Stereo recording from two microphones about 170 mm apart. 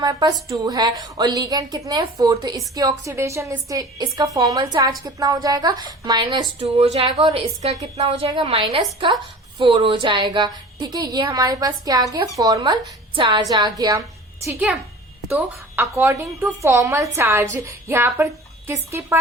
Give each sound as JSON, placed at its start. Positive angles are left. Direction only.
{"t": 0.0, "sound": "a woman's voice", "side_deg": -25}
{"t": 6.6, "sound": "a woman's voice", "side_deg": -35}
{"t": 15.3, "sound": "a woman's voice", "side_deg": -15}